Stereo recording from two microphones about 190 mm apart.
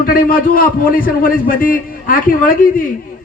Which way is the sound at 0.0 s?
50° left (ahead or behind).